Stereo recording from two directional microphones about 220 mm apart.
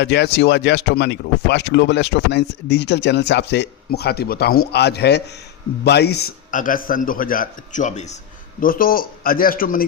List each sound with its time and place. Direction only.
0.0 s a man's voice: 50° left (ahead or behind)